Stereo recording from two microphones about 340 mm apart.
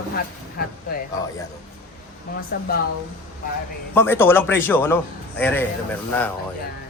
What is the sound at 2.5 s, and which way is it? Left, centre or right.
Speech, left.